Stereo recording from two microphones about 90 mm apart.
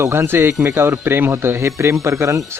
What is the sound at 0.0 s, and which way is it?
Speech, 30° right (ahead or behind).